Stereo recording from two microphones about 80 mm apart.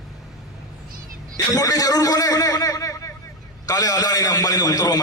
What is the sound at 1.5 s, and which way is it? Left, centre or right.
A man's voice, left.